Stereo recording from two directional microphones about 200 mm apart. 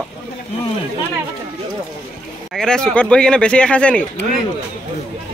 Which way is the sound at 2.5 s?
5° left (ahead or behind).